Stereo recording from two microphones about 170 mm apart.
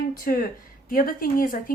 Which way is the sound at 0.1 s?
60° left (ahead or behind).